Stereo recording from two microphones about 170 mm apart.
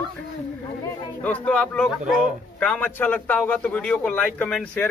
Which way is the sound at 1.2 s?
10° left (ahead or behind).